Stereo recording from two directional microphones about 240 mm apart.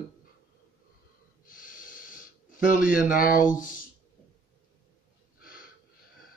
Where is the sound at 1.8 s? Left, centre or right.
Left.